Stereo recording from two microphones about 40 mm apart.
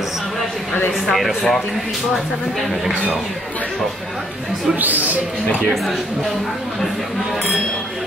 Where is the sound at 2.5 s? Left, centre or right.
Centre.